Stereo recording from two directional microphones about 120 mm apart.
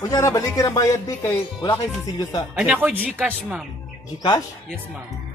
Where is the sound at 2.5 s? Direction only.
10° right (ahead or behind).